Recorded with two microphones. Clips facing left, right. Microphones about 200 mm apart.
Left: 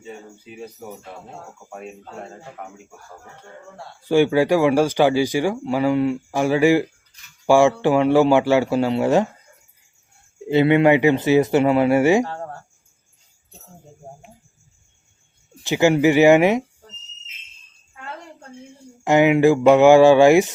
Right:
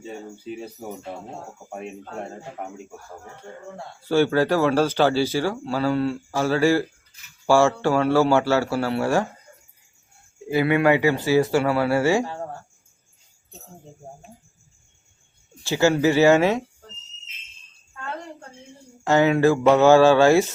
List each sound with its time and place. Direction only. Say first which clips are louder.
2.6 s speech: right 3 dB; 25° right (ahead or behind)
4.0 s speech: left 3 dB; 15° left (ahead or behind)
10.5 s speech: left 4 dB; 25° left (ahead or behind)
15.6 s speech: left 3 dB; 15° left (ahead or behind)
19.0 s speech: left 3 dB; 15° left (ahead or behind)